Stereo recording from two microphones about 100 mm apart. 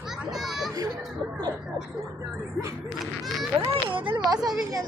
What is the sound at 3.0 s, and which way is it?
Speech, centre (ahead or behind).